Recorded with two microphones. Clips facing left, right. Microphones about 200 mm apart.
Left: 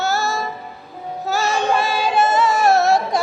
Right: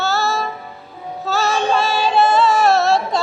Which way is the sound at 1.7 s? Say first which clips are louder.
Right 1 dB; 15° left (ahead or behind).